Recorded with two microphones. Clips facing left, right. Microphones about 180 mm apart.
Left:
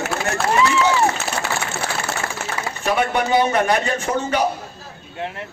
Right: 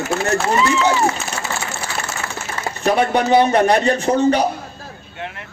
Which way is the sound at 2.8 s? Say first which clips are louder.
Right 4 dB; 35° right (ahead or behind).